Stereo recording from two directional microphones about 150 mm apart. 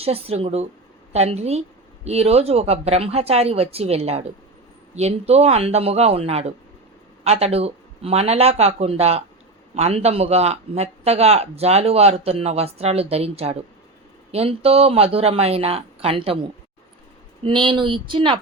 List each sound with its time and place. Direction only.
0.0 s a man's voice: 40° right (ahead or behind)